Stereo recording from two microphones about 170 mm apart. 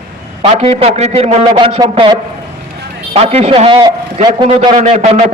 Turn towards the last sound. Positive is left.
turn(degrees=-35)  # may be behind; listen again after turning